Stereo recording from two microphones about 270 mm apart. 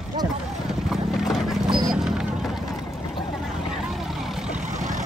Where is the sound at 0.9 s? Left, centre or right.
Centre.